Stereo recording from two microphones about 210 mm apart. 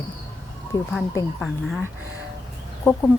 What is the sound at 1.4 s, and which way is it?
Speech, centre (ahead or behind).